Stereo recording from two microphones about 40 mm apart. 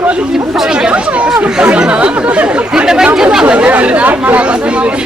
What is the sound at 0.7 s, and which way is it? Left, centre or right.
Chatter, right.